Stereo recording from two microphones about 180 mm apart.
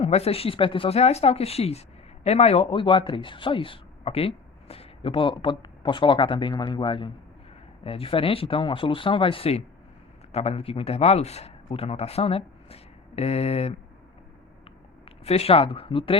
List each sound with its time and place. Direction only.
0.0 s speech: 35° left (ahead or behind)
15.2 s speech: 35° left (ahead or behind)